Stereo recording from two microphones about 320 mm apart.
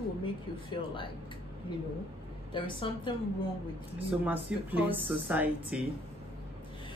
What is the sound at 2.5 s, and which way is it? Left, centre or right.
Speech, centre.